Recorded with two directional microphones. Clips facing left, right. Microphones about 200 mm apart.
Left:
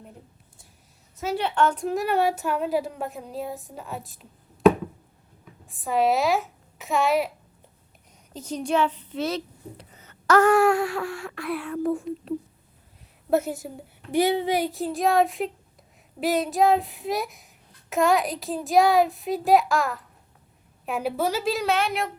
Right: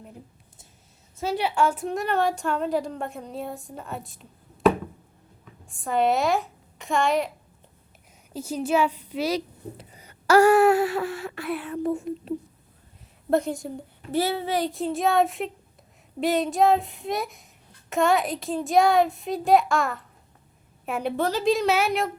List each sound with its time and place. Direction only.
1.1 s a sound: 30° right (ahead or behind)
1.4 s child singing: 10° right (ahead or behind)
5.6 s a child's voice: centre (ahead or behind)
8.3 s a woman's voice: 10° right (ahead or behind)
12.1 s speech: 55° right (ahead or behind)
13.3 s a woman's voice: 5° left (ahead or behind)
14.1 s a child's voice: 15° left (ahead or behind)
14.7 s child singing: centre (ahead or behind)